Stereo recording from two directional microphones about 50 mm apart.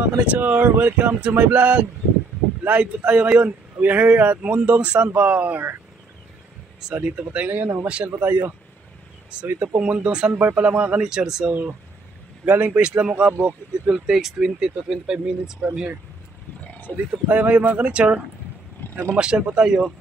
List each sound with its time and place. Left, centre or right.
0.0 s speech: right
7.0 s speech: right
8.2 s speech: right
9.6 s speech: right
10.3 s speech: right
10.6 s speech: right
11.0 s speech: centre
12.4 s speech: right
12.8 s speech: right
13.9 s speech: centre
16.9 s speech: right
18.8 s vehicle: left
19.1 s speech: centre